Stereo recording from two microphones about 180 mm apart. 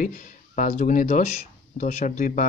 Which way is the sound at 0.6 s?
45° left (ahead or behind).